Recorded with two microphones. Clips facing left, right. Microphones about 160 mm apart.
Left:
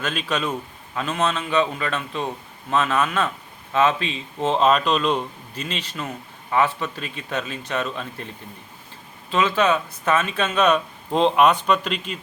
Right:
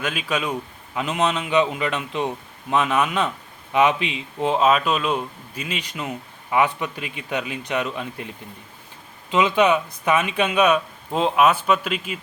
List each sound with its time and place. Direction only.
0.0 s speech: 10° right (ahead or behind)
9.3 s speech: 15° right (ahead or behind)